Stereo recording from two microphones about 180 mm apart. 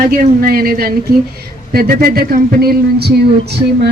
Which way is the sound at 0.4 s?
55° right (ahead or behind).